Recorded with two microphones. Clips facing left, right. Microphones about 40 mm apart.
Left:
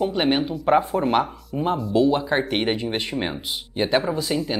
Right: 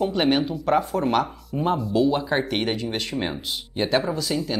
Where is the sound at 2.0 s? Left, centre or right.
Centre.